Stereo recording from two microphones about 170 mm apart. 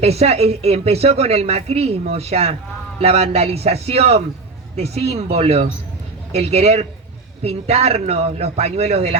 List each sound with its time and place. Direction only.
0.0 s speech: 40° right (ahead or behind)